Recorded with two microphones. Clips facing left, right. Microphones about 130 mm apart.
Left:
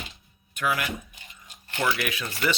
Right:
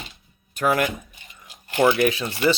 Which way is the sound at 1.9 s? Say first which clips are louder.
Right 9 dB; 30° right (ahead or behind).